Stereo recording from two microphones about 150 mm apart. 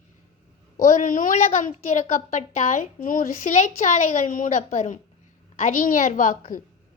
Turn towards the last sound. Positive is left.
turn(degrees=65)  # may be behind; listen again after turning